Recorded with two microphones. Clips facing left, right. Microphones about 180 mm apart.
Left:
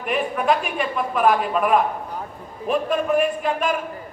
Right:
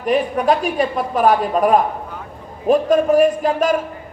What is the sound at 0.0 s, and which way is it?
A man's voice, 35° right (ahead or behind).